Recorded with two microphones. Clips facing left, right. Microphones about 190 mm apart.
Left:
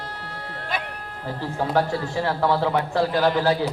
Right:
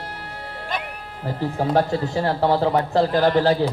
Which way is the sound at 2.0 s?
35° right (ahead or behind).